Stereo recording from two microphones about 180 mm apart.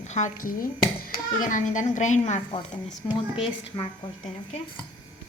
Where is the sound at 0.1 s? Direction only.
45° left (ahead or behind).